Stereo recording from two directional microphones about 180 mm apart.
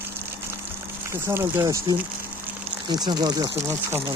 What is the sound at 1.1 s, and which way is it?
Speech, 15° right (ahead or behind).